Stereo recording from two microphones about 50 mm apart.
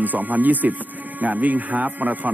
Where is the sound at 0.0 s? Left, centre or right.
Right.